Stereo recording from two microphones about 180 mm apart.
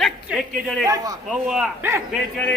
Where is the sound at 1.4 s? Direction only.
5° right (ahead or behind).